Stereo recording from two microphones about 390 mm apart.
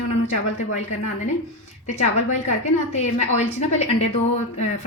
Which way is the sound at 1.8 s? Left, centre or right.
Centre.